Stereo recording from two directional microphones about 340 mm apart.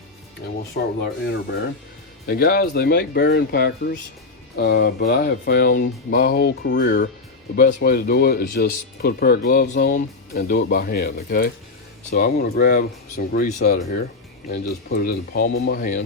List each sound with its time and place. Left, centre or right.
0.7 s speech: left